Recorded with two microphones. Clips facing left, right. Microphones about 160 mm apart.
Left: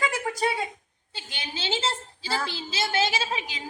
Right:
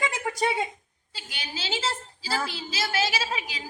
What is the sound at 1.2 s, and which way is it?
A woman's voice, 25° left (ahead or behind).